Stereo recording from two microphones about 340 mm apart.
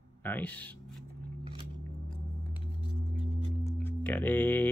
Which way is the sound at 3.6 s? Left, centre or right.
Centre.